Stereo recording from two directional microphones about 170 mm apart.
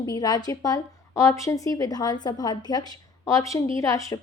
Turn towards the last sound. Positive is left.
turn(degrees=20)  # may be behind; listen again after turning